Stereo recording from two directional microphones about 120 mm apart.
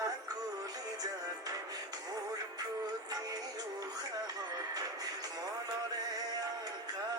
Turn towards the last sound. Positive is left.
turn(degrees=-35)  # may be behind; listen again after turning